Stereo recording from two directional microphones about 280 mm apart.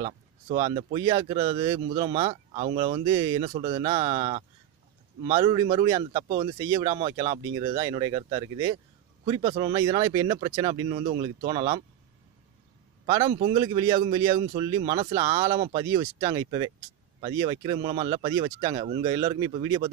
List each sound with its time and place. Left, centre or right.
0.0 s a man's voice: centre
13.0 s a man's voice: centre